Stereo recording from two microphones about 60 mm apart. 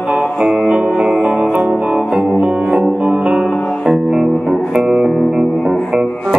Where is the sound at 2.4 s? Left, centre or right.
Right; by 5.7 s centre.